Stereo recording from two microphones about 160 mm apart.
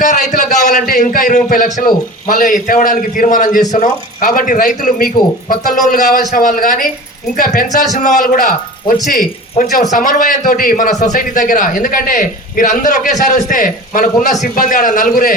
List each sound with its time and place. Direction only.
0.0 s a man's voice: 50° left (ahead or behind)